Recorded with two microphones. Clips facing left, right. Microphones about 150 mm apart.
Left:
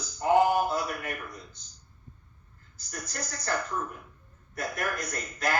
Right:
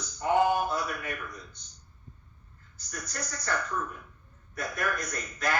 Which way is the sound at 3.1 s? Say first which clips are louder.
Left 1 dB; 25° left (ahead or behind).